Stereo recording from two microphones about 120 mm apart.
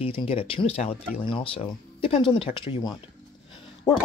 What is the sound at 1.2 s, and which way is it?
Speech, 45° left (ahead or behind).